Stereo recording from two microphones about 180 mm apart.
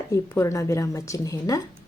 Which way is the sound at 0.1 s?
15° left (ahead or behind).